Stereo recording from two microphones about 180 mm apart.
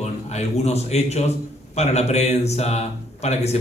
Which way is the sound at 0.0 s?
40° left (ahead or behind).